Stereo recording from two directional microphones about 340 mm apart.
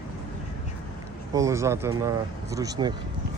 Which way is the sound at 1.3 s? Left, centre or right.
Centre.